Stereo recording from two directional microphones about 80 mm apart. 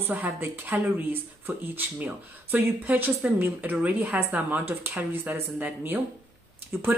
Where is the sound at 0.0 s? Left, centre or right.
Right.